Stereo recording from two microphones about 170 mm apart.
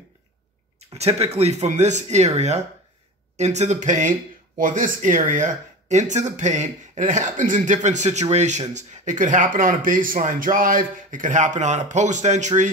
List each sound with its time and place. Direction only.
0.7 s speech: 40° right (ahead or behind)